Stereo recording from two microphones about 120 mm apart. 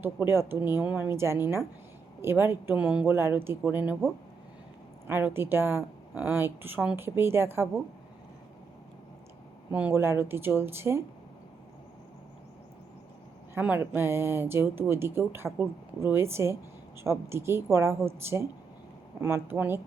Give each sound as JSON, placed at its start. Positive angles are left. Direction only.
{"t": 0.0, "sound": "speech", "side_deg": -20}
{"t": 3.2, "sound": "speech", "side_deg": -20}
{"t": 5.0, "sound": "speech", "side_deg": -20}
{"t": 9.7, "sound": "speech", "side_deg": -15}
{"t": 13.5, "sound": "speech", "side_deg": -15}